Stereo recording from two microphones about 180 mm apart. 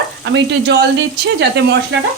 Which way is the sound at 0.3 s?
75° right (ahead or behind).